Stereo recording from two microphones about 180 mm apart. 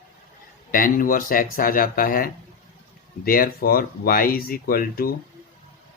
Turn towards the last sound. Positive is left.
turn(degrees=55)  # may be behind; listen again after turning